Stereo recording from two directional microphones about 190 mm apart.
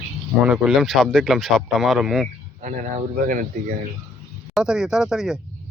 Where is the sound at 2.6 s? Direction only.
40° right (ahead or behind).